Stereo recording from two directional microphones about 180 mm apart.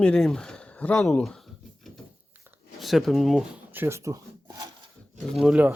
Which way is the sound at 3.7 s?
15° right (ahead or behind).